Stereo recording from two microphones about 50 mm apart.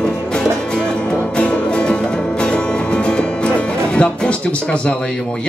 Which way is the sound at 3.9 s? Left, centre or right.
Left.